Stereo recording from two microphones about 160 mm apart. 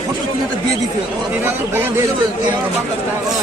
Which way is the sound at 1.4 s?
15° right (ahead or behind).